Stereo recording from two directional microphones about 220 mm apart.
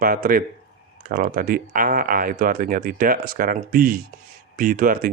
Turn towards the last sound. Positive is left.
turn(degrees=-40)  # may be behind; listen again after turning